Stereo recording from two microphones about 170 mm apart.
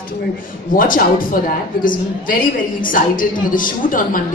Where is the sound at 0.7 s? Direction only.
55° left (ahead or behind).